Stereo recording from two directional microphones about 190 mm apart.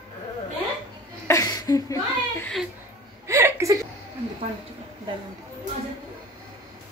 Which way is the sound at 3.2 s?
15° right (ahead or behind).